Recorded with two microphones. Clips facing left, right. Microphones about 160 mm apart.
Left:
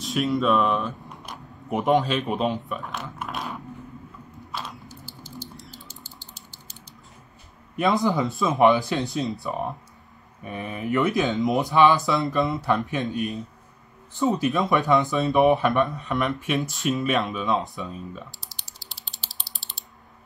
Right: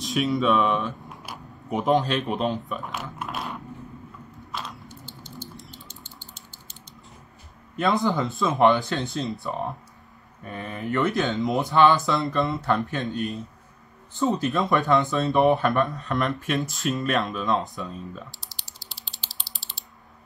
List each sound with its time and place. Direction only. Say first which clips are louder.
0.0 s speech: even; centre (ahead or behind)
4.8 s a sound: even; 35° left (ahead or behind)
7.8 s speech: left 1 dB; centre (ahead or behind)
19.6 s typing: even; centre (ahead or behind)